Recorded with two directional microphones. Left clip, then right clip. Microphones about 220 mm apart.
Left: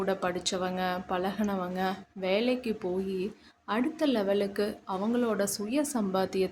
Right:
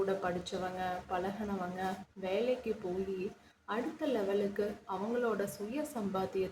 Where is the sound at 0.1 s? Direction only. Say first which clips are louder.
Left 5 dB; 55° left (ahead or behind).